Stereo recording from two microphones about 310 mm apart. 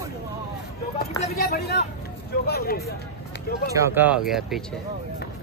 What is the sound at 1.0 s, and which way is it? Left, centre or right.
Speech, left.